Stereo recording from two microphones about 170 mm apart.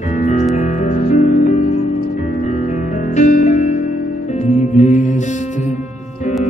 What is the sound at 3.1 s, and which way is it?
Music, 45° left (ahead or behind).